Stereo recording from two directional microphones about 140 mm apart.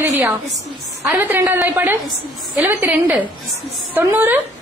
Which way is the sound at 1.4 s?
15° right (ahead or behind).